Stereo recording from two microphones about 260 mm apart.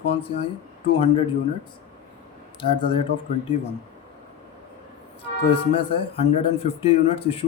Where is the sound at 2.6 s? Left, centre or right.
Centre.